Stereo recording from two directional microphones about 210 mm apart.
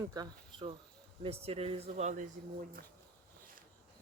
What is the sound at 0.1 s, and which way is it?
Speech, 20° right (ahead or behind).